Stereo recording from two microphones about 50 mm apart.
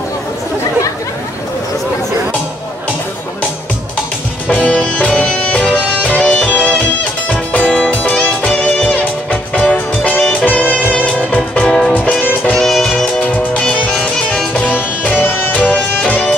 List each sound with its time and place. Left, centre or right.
4.5 s music: left
12.5 s music: centre
13.2 s music: left